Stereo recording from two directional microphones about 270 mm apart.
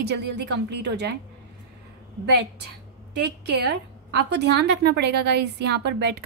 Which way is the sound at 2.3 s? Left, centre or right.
Right.